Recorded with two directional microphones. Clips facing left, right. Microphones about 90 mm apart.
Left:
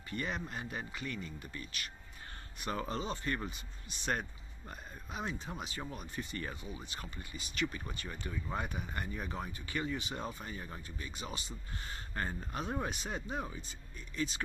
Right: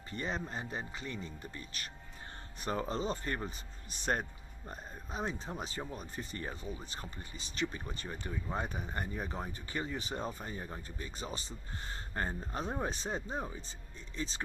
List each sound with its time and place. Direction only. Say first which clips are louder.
0.1 s speech: right 1 dB; 30° right (ahead or behind)